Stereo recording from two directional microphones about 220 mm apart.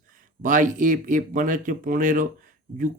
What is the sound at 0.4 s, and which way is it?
Speech, 35° right (ahead or behind).